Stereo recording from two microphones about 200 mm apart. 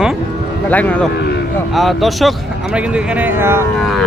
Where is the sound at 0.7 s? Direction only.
5° left (ahead or behind); by 3.6 s 10° right (ahead or behind).